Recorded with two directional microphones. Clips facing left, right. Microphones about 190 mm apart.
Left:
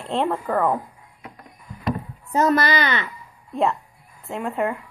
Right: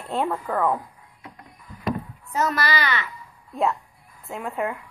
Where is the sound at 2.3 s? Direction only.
30° left (ahead or behind).